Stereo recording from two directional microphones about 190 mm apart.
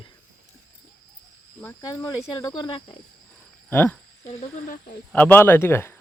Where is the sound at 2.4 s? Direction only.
25° left (ahead or behind).